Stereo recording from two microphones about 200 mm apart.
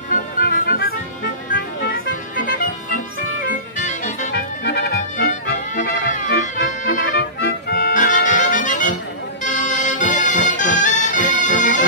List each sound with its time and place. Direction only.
0.1 s music: 45° left (ahead or behind)
4.3 s music: 55° left (ahead or behind)
7.3 s accordion: 50° left (ahead or behind)
9.4 s music: 40° left (ahead or behind)